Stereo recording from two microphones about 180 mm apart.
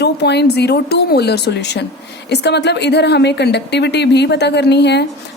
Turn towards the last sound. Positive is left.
turn(degrees=70)  # may be behind; listen again after turning